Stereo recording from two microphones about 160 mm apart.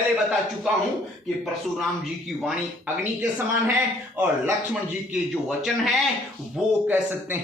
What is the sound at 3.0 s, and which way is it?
Speech, 10° right (ahead or behind).